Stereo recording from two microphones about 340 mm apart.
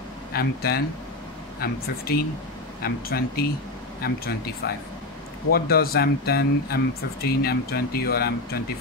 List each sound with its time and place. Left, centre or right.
0.3 s speech: left